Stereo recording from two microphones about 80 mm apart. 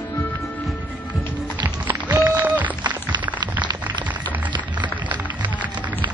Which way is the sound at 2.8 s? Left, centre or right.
Right.